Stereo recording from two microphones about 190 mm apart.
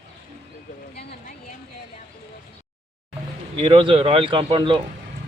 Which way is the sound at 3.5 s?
25° right (ahead or behind).